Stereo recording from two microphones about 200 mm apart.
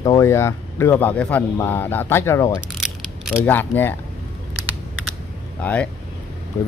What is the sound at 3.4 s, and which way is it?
Speech, 10° left (ahead or behind).